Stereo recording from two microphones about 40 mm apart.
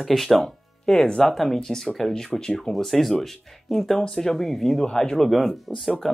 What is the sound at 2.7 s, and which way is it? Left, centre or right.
Speech, centre.